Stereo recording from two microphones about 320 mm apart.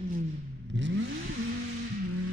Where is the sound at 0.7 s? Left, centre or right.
Right.